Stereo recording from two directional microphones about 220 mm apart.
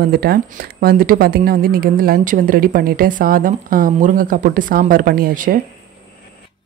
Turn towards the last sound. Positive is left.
turn(degrees=-40)  # may be behind; listen again after turning